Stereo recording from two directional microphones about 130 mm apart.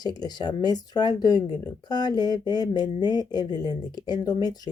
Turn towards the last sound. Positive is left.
turn(degrees=30)  # may be behind; listen again after turning